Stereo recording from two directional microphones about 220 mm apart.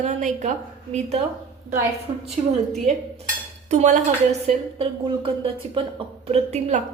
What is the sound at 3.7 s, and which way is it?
A woman's voice, 30° right (ahead or behind).